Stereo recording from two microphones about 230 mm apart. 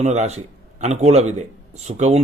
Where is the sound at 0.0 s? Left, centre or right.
Right.